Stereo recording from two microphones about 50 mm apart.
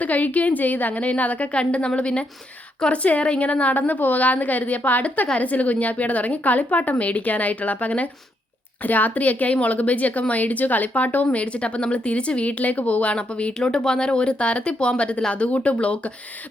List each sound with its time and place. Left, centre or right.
0.0 s a woman's voice: left